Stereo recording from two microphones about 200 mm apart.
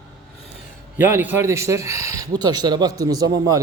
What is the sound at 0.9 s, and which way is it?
Speech, 10° right (ahead or behind).